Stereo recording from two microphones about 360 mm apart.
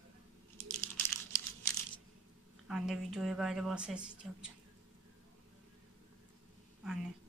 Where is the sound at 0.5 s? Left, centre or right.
Centre.